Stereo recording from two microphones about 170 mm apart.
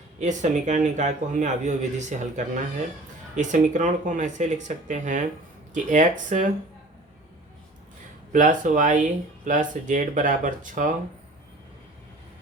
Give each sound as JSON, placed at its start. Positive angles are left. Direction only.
{"t": 0.2, "sound": "speech", "side_deg": -45}
{"t": 8.3, "sound": "speech", "side_deg": -50}